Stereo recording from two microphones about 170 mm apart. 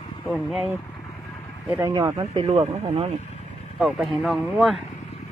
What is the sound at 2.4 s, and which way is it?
Speech, 35° right (ahead or behind).